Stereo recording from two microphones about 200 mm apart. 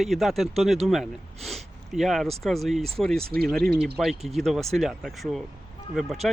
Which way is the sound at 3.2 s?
50° right (ahead or behind).